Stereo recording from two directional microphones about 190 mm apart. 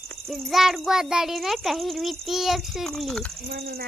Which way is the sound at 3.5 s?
50° right (ahead or behind).